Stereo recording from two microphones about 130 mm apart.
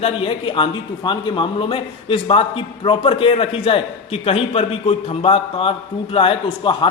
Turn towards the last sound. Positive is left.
turn(degrees=40)  # may be behind; listen again after turning